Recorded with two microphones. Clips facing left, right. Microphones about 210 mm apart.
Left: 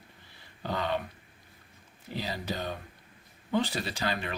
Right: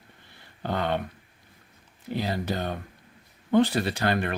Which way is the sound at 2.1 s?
55° right (ahead or behind).